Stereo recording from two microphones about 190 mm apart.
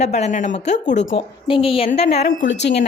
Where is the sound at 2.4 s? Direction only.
65° left (ahead or behind).